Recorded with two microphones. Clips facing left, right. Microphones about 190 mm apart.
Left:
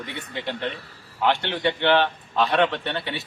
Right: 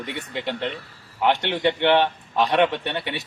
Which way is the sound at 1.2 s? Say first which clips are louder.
Right 2 dB; 15° right (ahead or behind).